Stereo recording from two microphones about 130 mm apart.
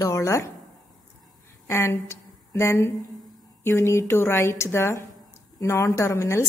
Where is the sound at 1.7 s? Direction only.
20° left (ahead or behind).